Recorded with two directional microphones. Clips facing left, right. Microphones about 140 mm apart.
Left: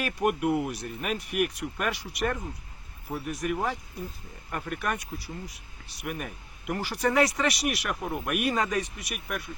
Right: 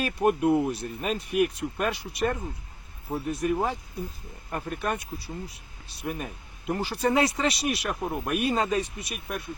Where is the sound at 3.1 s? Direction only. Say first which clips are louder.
Right 4 dB; 25° right (ahead or behind).